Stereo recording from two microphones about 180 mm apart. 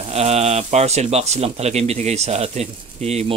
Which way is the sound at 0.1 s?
35° right (ahead or behind).